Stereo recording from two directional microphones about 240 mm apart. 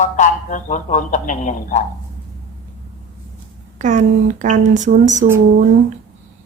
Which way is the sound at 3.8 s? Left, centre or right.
Right.